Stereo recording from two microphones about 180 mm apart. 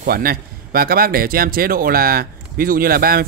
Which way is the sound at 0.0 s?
55° right (ahead or behind).